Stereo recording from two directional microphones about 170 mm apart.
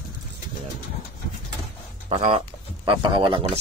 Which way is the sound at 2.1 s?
40° right (ahead or behind).